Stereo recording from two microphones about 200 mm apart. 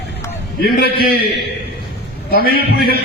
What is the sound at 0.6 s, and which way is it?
Speech, 50° left (ahead or behind).